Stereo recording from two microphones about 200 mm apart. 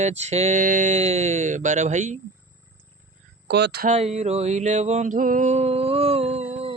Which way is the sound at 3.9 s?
35° right (ahead or behind).